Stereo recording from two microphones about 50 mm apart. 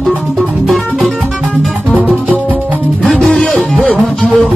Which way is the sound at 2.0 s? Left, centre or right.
Right.